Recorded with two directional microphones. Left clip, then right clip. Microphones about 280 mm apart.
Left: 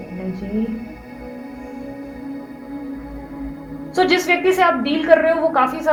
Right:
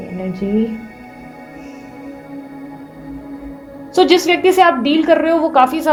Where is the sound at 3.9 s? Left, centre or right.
Right.